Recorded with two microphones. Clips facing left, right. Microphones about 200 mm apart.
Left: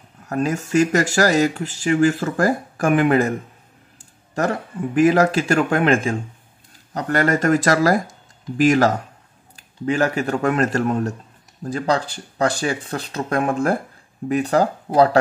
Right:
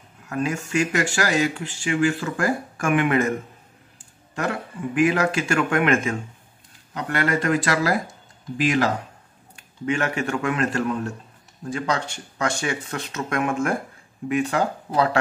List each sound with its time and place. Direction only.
0.3 s speech: 40° left (ahead or behind)
4.9 s speech: 40° left (ahead or behind)